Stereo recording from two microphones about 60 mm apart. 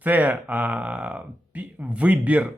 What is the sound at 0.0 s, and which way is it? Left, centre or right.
Speech, right.